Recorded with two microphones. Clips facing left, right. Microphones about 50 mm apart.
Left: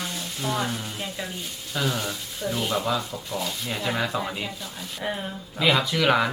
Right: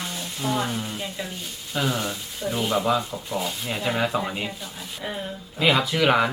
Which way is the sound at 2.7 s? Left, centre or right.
Centre.